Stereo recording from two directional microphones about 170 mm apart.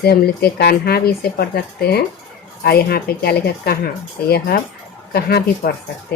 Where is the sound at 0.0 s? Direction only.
70° left (ahead or behind).